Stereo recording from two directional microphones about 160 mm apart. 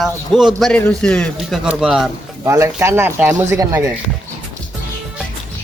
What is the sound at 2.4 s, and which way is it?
Speech, 20° right (ahead or behind).